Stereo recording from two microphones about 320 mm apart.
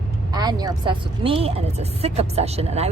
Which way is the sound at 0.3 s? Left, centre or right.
Centre.